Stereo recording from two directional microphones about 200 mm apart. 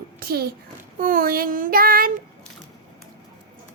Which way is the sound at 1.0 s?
45° right (ahead or behind).